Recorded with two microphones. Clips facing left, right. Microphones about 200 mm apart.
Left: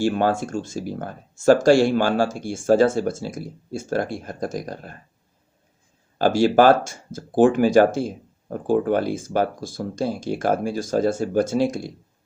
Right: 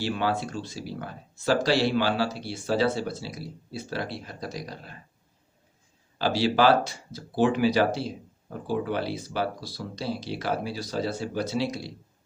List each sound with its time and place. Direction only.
0.0 s speech: 50° left (ahead or behind)
6.1 s speech: 50° left (ahead or behind)